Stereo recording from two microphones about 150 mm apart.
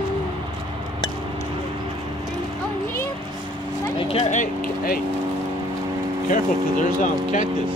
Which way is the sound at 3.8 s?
35° left (ahead or behind).